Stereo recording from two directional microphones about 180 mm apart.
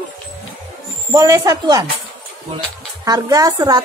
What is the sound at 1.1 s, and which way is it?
Speech, 20° right (ahead or behind).